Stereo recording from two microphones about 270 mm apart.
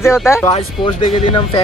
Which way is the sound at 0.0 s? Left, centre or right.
Centre.